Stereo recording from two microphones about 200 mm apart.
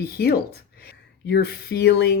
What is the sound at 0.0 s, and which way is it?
Speech, 50° left (ahead or behind).